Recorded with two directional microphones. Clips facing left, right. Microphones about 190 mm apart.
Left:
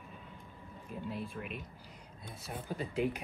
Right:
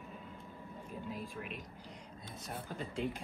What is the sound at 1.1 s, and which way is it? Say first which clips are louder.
Speech: left 4 dB; centre (ahead or behind).